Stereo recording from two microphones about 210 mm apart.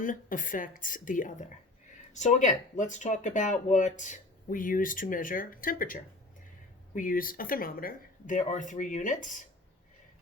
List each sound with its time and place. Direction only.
0.0 s speech: 40° left (ahead or behind)